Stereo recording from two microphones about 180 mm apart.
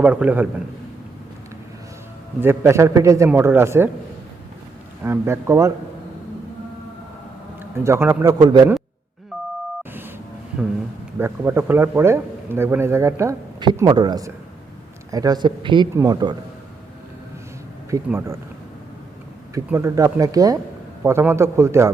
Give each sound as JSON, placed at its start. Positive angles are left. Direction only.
{"t": 0.0, "sound": "a man's voice", "side_deg": -5}
{"t": 2.4, "sound": "a man's voice", "side_deg": -15}
{"t": 5.0, "sound": "a man's voice", "side_deg": -15}
{"t": 7.6, "sound": "a man's voice", "side_deg": -10}
{"t": 11.2, "sound": "a man's voice", "side_deg": -10}
{"t": 17.9, "sound": "a man's voice", "side_deg": -15}
{"t": 19.5, "sound": "a man's voice", "side_deg": -15}